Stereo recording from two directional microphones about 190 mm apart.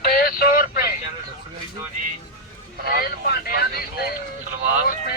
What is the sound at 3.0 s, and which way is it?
Vehicle, 55° left (ahead or behind).